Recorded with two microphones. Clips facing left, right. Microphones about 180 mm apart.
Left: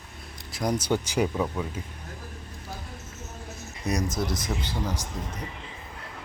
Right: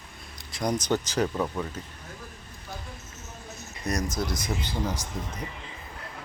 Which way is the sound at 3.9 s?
10° left (ahead or behind).